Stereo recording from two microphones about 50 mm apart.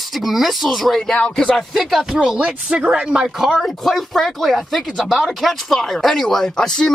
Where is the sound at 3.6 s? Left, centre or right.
Centre.